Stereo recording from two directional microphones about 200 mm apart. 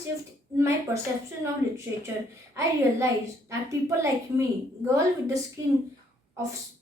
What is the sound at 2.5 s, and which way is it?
A woman's voice, 15° right (ahead or behind).